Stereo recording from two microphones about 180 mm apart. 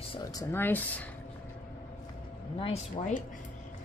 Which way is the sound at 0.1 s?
20° left (ahead or behind).